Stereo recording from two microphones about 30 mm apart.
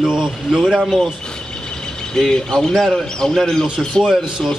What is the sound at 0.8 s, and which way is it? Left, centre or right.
Speech, centre.